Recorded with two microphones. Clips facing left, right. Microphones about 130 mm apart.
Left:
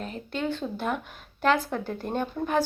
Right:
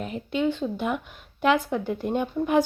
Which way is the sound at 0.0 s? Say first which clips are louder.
Right 5 dB; 15° right (ahead or behind).